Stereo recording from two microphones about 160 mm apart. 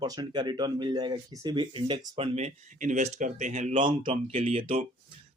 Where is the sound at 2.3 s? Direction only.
45° right (ahead or behind).